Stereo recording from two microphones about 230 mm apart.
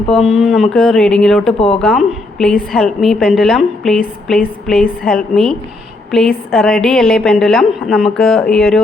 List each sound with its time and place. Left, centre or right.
0.1 s a woman's voice: centre
1.5 s speech: left
1.8 s a woman's voice: centre